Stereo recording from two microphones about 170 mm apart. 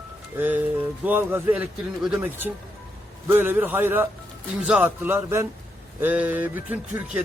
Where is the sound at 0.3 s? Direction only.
10° right (ahead or behind).